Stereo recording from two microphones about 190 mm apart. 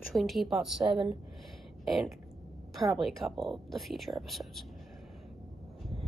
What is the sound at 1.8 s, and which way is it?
A woman's voice, centre (ahead or behind).